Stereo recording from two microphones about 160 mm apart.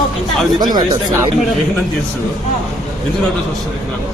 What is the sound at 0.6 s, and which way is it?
Speech, 25° right (ahead or behind).